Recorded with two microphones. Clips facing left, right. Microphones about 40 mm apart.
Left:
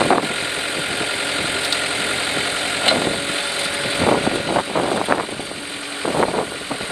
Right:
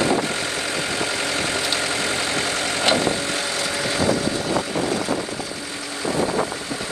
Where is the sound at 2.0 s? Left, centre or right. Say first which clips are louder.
Left 1 dB; left.